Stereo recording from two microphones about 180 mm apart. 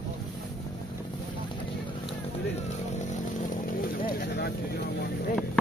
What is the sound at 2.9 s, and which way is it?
Speech, 45° left (ahead or behind).